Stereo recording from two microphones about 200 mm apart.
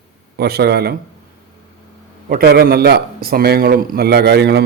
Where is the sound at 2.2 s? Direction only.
50° right (ahead or behind).